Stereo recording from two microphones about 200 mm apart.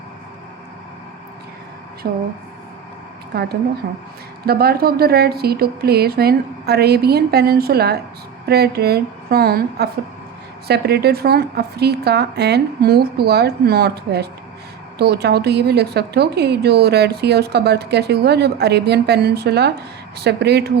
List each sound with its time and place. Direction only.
2.0 s a woman's voice: 50° right (ahead or behind)
4.4 s a woman's voice: 50° right (ahead or behind)